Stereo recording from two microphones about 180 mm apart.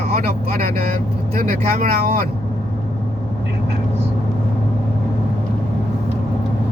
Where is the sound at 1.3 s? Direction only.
55° right (ahead or behind).